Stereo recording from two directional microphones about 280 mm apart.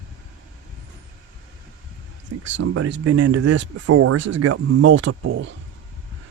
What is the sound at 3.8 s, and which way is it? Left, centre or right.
Speech, right.